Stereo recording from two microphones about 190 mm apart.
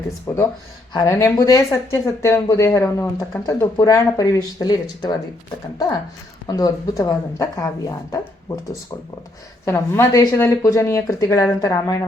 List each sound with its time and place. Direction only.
0.3 s speech: 10° left (ahead or behind)
6.5 s speech: 20° left (ahead or behind)
9.6 s speech: 15° left (ahead or behind)